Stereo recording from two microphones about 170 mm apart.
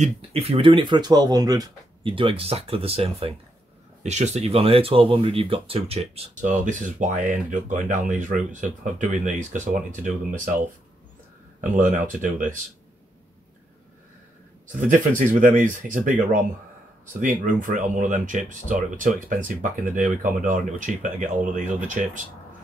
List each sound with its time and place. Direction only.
0.0 s speech: 35° right (ahead or behind)
6.4 s speech: 50° right (ahead or behind)
12.2 s speech: 50° right (ahead or behind)
14.7 s speech: 50° right (ahead or behind)
17.4 s speech: 50° right (ahead or behind)